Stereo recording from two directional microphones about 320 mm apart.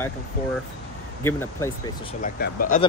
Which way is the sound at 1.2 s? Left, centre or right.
Centre.